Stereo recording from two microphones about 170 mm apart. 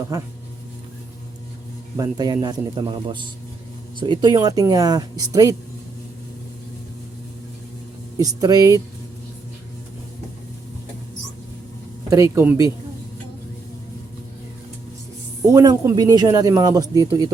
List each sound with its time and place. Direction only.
0.1 s speech: 20° right (ahead or behind)
2.0 s speech: 25° right (ahead or behind)
8.2 s speech: 20° right (ahead or behind)
12.1 s speech: 15° right (ahead or behind)
15.4 s speech: 20° right (ahead or behind)